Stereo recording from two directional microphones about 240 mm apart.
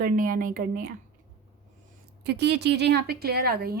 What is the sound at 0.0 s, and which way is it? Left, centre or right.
Speech, right.